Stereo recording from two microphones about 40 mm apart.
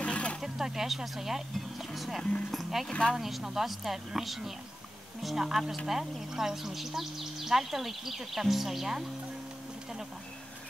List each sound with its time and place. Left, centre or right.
0.0 s a sound: left
0.4 s music: centre
2.5 s a woman's voice: centre
2.9 s speech: left
3.2 s a woman's voice: centre